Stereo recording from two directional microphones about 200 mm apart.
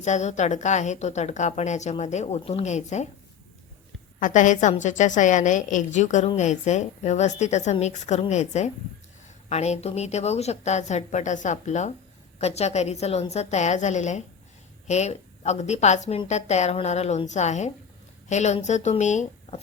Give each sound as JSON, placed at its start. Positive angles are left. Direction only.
{"t": 0.0, "sound": "a woman's voice", "side_deg": 35}
{"t": 4.2, "sound": "a woman's voice", "side_deg": 40}